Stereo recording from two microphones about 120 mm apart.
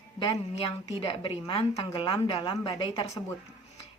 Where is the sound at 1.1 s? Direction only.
45° left (ahead or behind).